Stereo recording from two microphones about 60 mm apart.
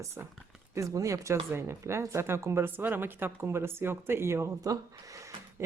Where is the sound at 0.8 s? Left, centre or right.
Right.